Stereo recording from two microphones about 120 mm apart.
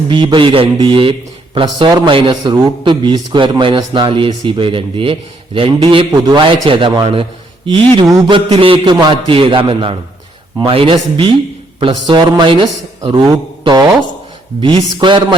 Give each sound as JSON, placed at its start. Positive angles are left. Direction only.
{"t": 0.1, "sound": "a man's voice", "side_deg": -40}
{"t": 8.0, "sound": "a man's voice", "side_deg": -35}